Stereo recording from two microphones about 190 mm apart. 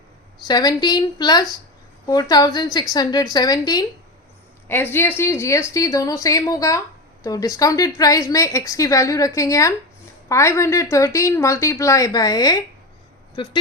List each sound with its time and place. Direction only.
0.4 s a woman's voice: 20° left (ahead or behind)